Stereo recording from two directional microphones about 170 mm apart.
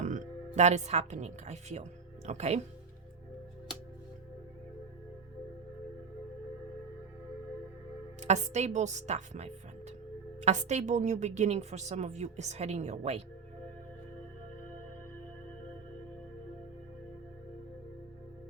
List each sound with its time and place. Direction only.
0.0 s speech: 45° right (ahead or behind)
8.2 s a woman's voice: 40° right (ahead or behind)